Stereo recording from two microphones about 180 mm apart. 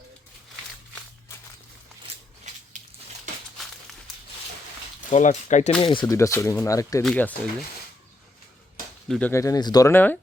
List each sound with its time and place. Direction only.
5.1 s speech: 40° left (ahead or behind)
5.8 s speech: 25° left (ahead or behind)
6.1 s speech: 15° left (ahead or behind)
9.0 s speech: 5° left (ahead or behind)
9.3 s speech: 20° left (ahead or behind)